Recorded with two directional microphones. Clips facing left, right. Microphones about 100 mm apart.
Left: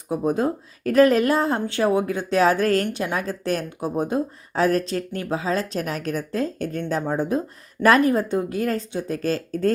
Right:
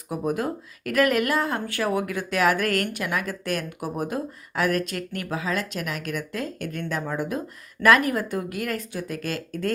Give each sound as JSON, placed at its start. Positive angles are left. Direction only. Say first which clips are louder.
{"t": 0.1, "sound": "speech", "louder": "left 4 dB", "side_deg": 25}